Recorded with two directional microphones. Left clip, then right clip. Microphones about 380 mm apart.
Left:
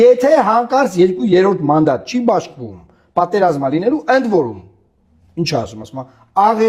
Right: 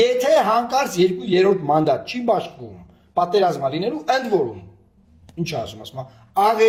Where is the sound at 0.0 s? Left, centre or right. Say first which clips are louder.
Left 6 dB; left.